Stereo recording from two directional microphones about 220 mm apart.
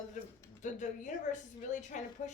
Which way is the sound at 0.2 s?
35° left (ahead or behind).